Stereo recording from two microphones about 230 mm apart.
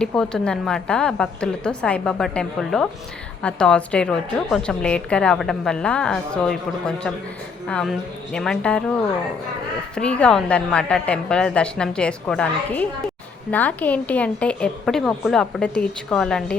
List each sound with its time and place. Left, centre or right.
0.0 s a woman's voice: centre
9.9 s a woman's voice: centre